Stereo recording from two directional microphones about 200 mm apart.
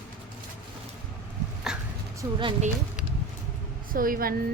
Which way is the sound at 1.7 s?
5° right (ahead or behind).